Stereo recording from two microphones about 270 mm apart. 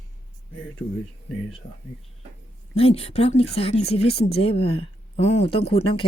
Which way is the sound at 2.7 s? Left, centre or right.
Left.